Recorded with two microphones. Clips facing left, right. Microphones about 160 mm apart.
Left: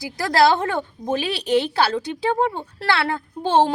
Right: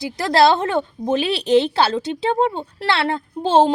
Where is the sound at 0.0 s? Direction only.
25° right (ahead or behind).